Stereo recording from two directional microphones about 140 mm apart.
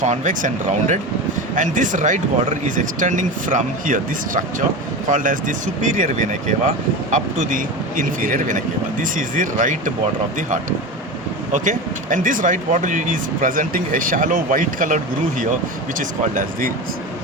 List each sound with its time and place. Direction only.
0.0 s speech: 60° right (ahead or behind); by 16.7 s 80° right